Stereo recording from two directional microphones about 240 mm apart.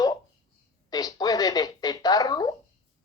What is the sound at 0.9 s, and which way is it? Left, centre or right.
Speech, centre.